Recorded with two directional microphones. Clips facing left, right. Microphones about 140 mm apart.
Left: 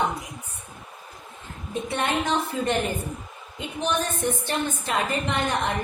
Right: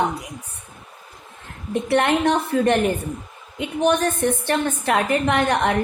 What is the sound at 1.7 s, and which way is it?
A woman's voice, 65° right (ahead or behind).